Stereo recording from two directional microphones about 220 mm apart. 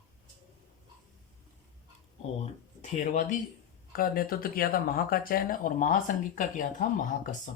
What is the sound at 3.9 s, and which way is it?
Speech, 40° left (ahead or behind).